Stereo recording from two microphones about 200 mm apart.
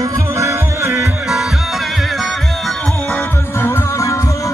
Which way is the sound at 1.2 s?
Centre (ahead or behind).